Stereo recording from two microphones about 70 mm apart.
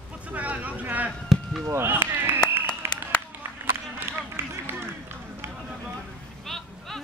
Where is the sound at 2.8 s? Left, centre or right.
Right.